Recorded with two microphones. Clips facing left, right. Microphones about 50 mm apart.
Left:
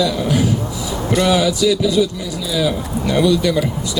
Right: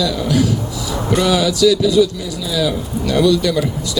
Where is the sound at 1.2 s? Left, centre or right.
Centre.